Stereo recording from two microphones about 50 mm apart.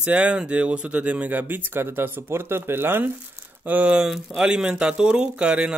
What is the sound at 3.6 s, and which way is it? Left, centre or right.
Speech, right.